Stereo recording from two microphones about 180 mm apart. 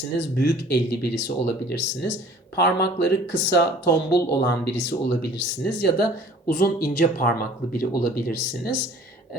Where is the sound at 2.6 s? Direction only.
65° left (ahead or behind); by 3.7 s 80° left.